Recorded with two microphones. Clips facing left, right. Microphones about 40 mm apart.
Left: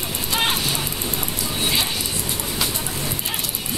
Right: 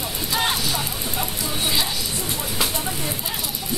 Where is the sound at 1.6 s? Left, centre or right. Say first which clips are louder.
Left 1 dB; left.